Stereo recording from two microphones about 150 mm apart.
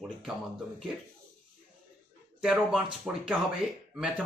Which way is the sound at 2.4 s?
5° right (ahead or behind).